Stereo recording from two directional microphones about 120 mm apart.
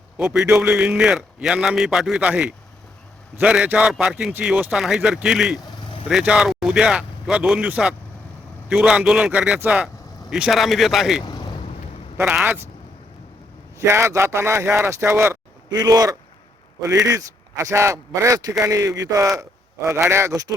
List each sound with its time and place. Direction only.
0.2 s a man's voice: 10° right (ahead or behind)
11.3 s vehicle: 40° left (ahead or behind)
12.2 s a man's voice: 5° right (ahead or behind)
13.7 s speech: 20° right (ahead or behind)
15.7 s speech: 30° right (ahead or behind)
19.4 s a sound: 25° right (ahead or behind)
20.1 s speech: 20° right (ahead or behind)